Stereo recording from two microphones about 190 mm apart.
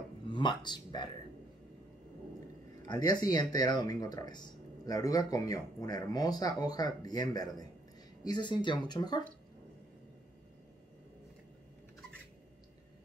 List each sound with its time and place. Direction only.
0.3 s speech: 25° left (ahead or behind)
2.9 s speech: 20° left (ahead or behind)